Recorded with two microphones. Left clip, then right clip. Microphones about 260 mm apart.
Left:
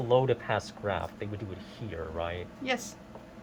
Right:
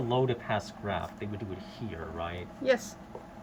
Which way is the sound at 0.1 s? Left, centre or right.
Centre.